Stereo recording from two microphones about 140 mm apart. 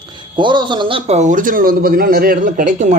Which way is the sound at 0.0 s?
30° right (ahead or behind).